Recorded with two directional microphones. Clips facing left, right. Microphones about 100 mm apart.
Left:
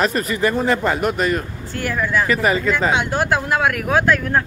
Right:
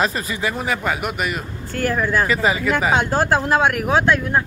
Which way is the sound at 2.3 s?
20° right (ahead or behind).